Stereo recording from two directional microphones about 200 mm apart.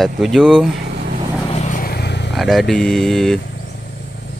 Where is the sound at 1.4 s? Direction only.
35° left (ahead or behind); by 2.3 s 55° left (ahead or behind).